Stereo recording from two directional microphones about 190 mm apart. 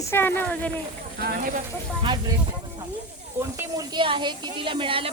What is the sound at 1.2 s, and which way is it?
Speech, 50° right (ahead or behind).